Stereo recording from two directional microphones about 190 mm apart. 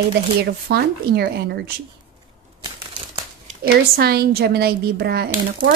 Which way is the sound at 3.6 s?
55° right (ahead or behind).